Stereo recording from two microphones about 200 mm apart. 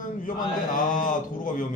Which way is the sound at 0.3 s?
40° left (ahead or behind).